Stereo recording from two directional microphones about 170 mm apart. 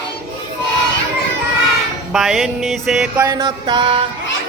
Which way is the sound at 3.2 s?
20° right (ahead or behind).